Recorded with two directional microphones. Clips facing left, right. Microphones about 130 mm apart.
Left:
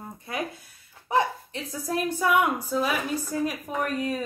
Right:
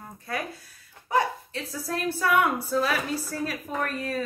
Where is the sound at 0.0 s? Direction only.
20° left (ahead or behind).